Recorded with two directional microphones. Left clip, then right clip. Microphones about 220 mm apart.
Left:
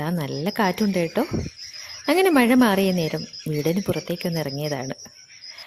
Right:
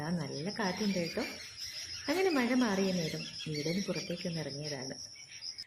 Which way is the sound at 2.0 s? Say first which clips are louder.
Left 13 dB; 50° left (ahead or behind).